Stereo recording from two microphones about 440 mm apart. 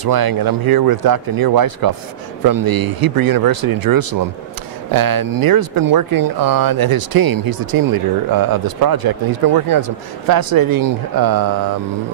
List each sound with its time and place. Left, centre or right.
0.0 s speech: right